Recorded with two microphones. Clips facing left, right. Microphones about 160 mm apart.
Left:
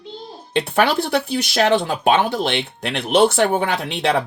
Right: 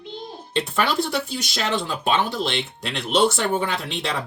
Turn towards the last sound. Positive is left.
turn(degrees=60)  # may be behind; listen again after turning